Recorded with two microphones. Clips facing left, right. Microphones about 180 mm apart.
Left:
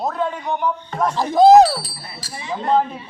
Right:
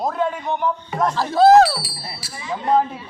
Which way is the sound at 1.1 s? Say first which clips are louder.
Left 2 dB; 15° left (ahead or behind).